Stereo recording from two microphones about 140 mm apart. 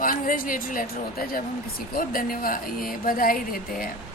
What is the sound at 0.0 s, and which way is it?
A woman's voice, 80° left.